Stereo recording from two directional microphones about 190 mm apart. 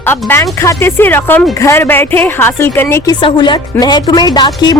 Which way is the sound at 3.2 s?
25° left (ahead or behind).